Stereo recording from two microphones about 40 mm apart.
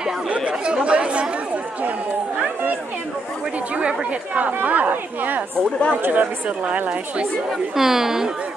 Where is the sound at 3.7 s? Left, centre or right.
Right.